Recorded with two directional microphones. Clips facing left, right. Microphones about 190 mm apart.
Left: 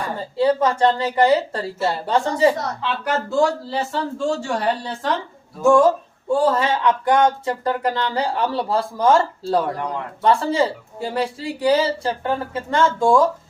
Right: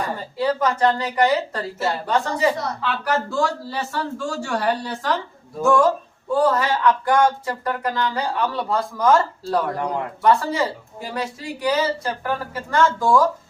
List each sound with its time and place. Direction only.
0.2 s speech: 25° left (ahead or behind)